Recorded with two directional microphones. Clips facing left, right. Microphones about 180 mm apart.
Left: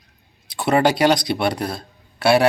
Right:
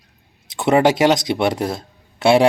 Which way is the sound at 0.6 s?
20° right (ahead or behind).